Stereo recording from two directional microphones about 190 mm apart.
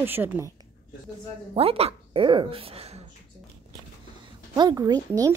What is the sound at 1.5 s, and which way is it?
Female singing, 30° right (ahead or behind).